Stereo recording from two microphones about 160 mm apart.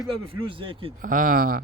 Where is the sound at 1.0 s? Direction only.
60° right (ahead or behind).